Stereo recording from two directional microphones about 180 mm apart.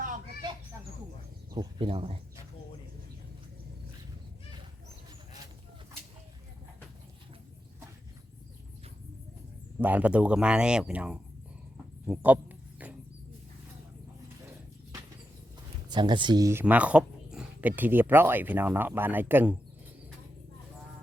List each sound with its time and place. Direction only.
1.5 s speech: 30° right (ahead or behind)
9.7 s speech: 10° right (ahead or behind)
15.9 s speech: 25° right (ahead or behind)